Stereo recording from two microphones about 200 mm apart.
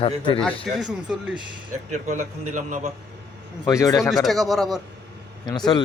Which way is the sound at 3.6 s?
15° left (ahead or behind).